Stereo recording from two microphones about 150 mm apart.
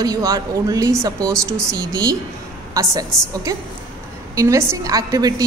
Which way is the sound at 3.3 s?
25° right (ahead or behind).